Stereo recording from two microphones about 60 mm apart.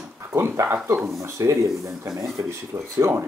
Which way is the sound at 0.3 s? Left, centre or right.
Right.